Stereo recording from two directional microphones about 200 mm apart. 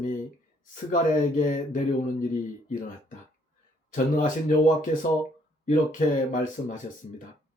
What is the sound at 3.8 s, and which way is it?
Speech, 40° left (ahead or behind).